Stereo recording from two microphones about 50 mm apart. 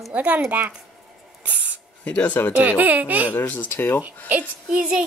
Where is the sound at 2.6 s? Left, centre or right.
Right.